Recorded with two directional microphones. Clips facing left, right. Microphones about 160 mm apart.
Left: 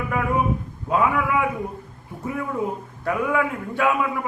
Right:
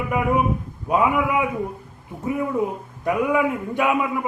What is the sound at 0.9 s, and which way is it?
Speech, 15° right (ahead or behind).